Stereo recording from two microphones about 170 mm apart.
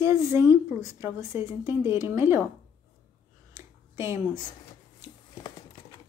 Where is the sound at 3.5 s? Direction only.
15° right (ahead or behind).